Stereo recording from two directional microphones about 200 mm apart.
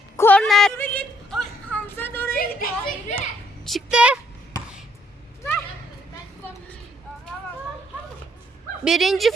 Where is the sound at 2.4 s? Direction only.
45° left (ahead or behind).